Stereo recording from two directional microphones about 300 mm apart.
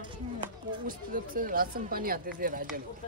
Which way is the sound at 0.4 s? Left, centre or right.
Right.